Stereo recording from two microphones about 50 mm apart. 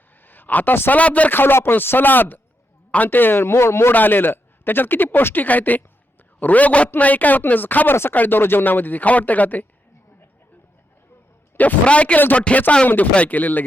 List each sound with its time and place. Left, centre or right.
0.2 s a man's voice: left
1.3 s speech: left
3.9 s speech: left
11.5 s a man's voice: left